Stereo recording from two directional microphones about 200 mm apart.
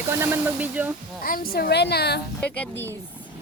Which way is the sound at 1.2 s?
45° left (ahead or behind).